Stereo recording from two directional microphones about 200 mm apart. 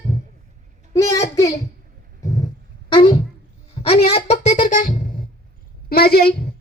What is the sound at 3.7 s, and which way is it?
Music, 30° left (ahead or behind).